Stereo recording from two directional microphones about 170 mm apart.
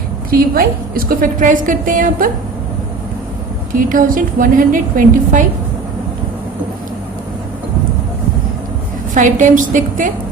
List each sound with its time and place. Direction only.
0.3 s a woman's voice: 60° right (ahead or behind)
3.8 s a woman's voice: 50° right (ahead or behind)
9.1 s a woman's voice: 50° right (ahead or behind)